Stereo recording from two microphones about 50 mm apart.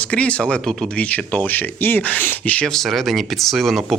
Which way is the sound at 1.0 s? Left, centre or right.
Left.